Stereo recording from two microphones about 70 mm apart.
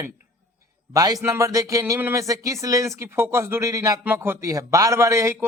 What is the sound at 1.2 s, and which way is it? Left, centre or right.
Speech, right.